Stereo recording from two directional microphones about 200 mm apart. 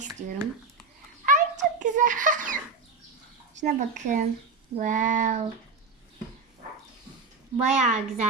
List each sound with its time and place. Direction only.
0.0 s speech: 35° right (ahead or behind)
1.2 s a sound: 40° right (ahead or behind)
3.6 s child singing: 35° right (ahead or behind)
7.5 s child singing: 35° right (ahead or behind)